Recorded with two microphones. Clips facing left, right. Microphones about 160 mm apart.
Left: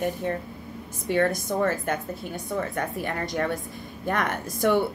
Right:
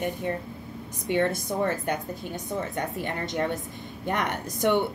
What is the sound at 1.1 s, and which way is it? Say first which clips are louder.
A woman's voice: left 2 dB; 20° right (ahead or behind).